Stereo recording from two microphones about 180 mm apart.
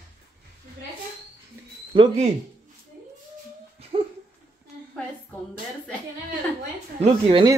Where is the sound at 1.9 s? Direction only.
35° right (ahead or behind).